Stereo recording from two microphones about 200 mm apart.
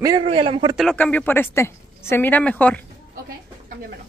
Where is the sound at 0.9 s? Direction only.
10° left (ahead or behind).